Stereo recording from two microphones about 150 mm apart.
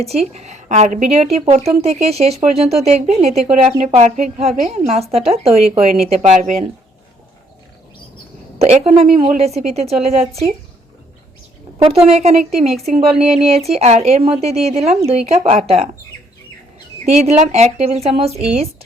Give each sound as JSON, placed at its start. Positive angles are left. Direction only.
{"t": 0.0, "sound": "speech", "side_deg": -45}
{"t": 8.5, "sound": "speech", "side_deg": -40}
{"t": 12.2, "sound": "speech", "side_deg": -45}
{"t": 17.1, "sound": "speech", "side_deg": -45}